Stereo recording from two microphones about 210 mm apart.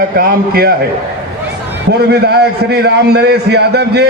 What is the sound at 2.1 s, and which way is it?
A man's voice, 50° right (ahead or behind).